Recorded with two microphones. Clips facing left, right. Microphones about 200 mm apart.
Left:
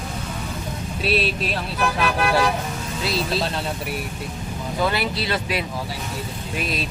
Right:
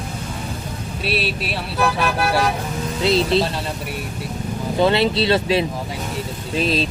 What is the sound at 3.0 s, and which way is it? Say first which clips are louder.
Speech: right 8 dB; 25° right (ahead or behind).